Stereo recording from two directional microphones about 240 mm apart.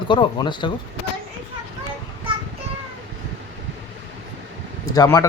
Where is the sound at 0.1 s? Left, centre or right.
Centre.